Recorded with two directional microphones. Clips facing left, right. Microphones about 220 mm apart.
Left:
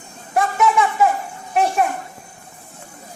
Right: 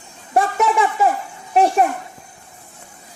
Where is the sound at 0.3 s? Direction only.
35° right (ahead or behind).